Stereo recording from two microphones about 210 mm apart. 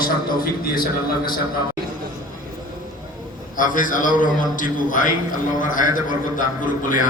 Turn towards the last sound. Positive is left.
turn(degrees=40)  # may be behind; listen again after turning